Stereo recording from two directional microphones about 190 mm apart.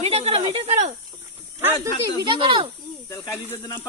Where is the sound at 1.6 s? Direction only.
10° right (ahead or behind).